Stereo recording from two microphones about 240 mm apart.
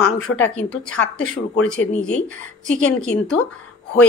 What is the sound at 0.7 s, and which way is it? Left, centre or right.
A woman's voice, centre.